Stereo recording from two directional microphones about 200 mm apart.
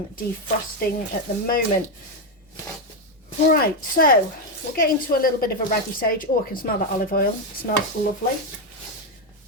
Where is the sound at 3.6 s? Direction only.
45° left (ahead or behind).